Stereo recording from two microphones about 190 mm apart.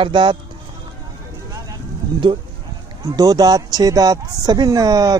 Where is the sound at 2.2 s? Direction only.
25° right (ahead or behind).